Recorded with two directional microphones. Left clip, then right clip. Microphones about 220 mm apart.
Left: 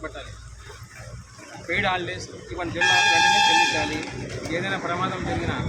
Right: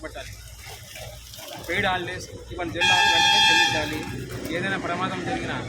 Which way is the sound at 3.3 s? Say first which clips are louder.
Even; 50° right (ahead or behind).